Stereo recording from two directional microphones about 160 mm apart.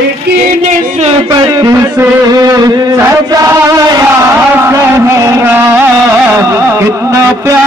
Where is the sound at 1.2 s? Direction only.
25° right (ahead or behind).